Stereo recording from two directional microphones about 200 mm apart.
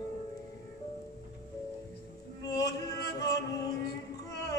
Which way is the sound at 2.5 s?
20° left (ahead or behind).